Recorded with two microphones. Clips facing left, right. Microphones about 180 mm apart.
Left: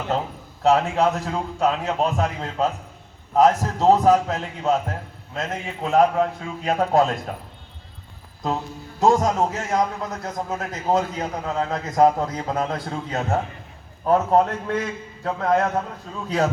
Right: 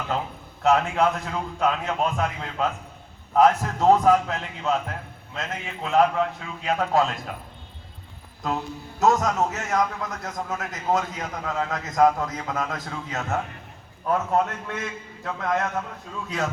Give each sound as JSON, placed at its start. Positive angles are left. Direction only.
{"t": 0.6, "sound": "a man's voice", "side_deg": 30}
{"t": 9.0, "sound": "a man's voice", "side_deg": 30}